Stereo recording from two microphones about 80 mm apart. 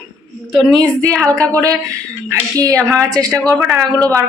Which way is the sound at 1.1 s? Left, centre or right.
Right.